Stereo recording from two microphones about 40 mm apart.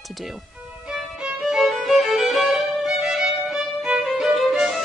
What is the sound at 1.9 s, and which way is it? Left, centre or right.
Violin, centre.